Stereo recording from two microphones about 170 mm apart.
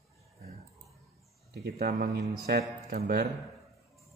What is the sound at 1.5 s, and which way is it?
Speech, 70° right (ahead or behind).